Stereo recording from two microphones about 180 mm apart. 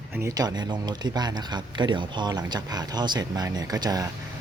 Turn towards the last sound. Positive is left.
turn(degrees=-20)  # may be behind; listen again after turning